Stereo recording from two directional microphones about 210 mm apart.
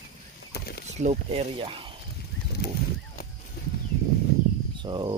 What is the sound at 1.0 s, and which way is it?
Speech, 30° right (ahead or behind).